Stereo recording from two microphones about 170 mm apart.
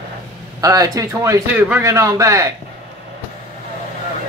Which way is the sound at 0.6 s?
20° right (ahead or behind).